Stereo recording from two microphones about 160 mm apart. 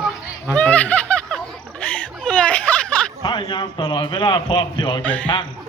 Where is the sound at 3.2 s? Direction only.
30° left (ahead or behind).